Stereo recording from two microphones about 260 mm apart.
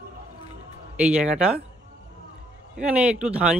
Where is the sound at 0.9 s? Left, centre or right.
Centre.